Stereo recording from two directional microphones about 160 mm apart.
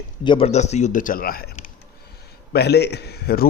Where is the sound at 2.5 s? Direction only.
90° left.